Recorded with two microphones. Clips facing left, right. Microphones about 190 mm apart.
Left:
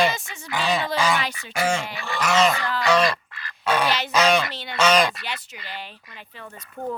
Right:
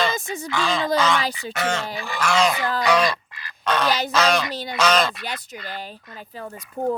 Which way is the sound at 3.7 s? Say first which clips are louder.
Even; 10° left (ahead or behind).